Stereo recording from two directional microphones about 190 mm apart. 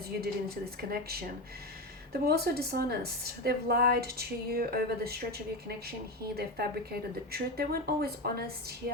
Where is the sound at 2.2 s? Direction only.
55° right (ahead or behind).